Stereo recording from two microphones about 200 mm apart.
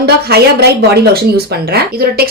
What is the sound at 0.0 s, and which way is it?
A woman's voice, 55° right (ahead or behind).